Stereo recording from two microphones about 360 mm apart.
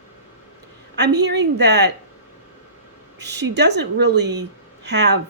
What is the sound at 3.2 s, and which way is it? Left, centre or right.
A woman's voice, right.